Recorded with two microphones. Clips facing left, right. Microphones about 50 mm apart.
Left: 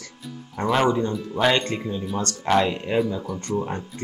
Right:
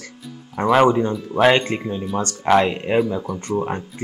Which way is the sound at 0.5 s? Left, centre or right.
Centre.